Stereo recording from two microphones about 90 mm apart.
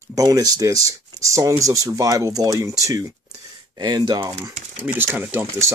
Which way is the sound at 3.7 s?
55° right (ahead or behind).